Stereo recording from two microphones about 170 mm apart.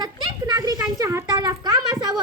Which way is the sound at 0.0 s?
25° right (ahead or behind).